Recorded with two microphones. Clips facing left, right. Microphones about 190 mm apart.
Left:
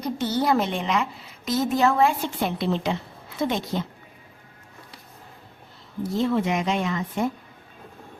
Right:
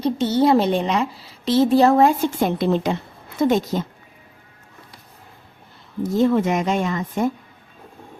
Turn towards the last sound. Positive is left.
turn(degrees=-45)  # may be behind; listen again after turning